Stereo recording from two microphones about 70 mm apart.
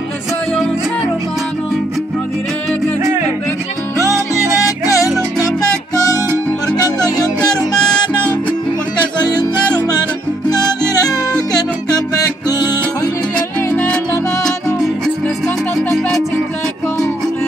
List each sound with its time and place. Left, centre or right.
4.6 s music: left
8.1 s music: centre
13.7 s music: centre